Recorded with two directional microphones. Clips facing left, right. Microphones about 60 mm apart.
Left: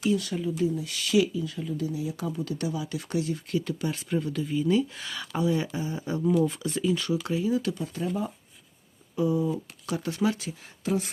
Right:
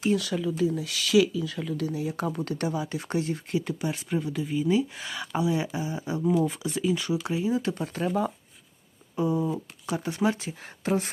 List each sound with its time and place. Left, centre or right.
0.2 s speech: right
1.9 s speech: right
3.5 s speech: right
7.8 s speech: right
9.1 s speech: right
10.6 s speech: right